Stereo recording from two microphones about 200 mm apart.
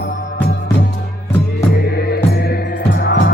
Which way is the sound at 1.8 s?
50° left (ahead or behind).